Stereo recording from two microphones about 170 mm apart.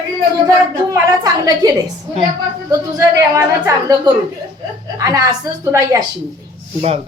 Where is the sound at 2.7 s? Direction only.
20° right (ahead or behind).